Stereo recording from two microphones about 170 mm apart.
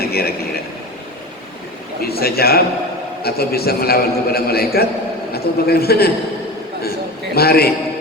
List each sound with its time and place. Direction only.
0.1 s a man's voice: 65° left (ahead or behind)
2.0 s a man's voice: 65° left (ahead or behind)
7.3 s a man's voice: 65° left (ahead or behind)